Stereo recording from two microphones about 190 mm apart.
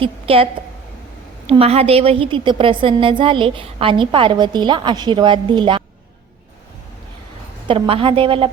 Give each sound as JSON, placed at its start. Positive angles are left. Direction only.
{"t": 0.0, "sound": "a woman's voice", "side_deg": -30}
{"t": 1.5, "sound": "a woman's voice", "side_deg": -30}
{"t": 7.7, "sound": "a woman's voice", "side_deg": -30}